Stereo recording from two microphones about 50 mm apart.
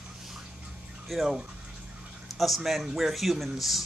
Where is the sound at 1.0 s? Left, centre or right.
Centre.